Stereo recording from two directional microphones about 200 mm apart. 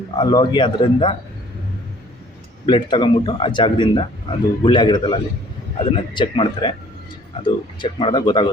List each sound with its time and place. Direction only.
0.2 s speech: 20° left (ahead or behind)
2.6 s speech: 25° left (ahead or behind)